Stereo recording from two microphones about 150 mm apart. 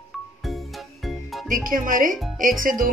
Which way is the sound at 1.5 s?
65° right (ahead or behind).